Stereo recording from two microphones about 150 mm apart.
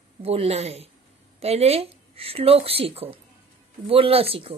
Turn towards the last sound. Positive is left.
turn(degrees=-40)  # may be behind; listen again after turning